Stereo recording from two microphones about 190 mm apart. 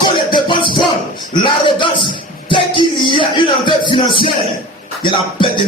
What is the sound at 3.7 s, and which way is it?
Music, 25° left (ahead or behind).